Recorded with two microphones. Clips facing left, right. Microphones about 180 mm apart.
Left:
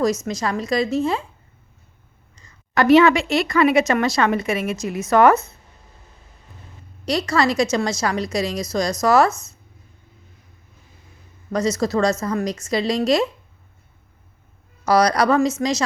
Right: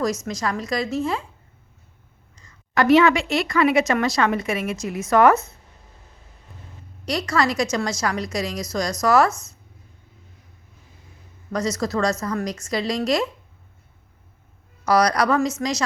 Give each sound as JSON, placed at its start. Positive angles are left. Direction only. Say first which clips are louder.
{"t": 0.3, "sound": "a woman's voice", "louder": "left 3 dB", "side_deg": 25}
{"t": 2.3, "sound": "a woman's voice", "louder": "left 1 dB", "side_deg": 25}
{"t": 6.5, "sound": "a sound", "louder": "right 1 dB", "side_deg": 0}
{"t": 7.0, "sound": "a woman's voice", "louder": "left 3 dB", "side_deg": 25}
{"t": 11.5, "sound": "a woman's voice", "louder": "left 3 dB", "side_deg": 25}
{"t": 14.8, "sound": "a woman's voice", "louder": "left 2 dB", "side_deg": 30}